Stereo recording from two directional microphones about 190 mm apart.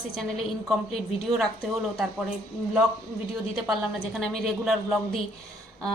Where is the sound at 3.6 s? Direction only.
Centre (ahead or behind).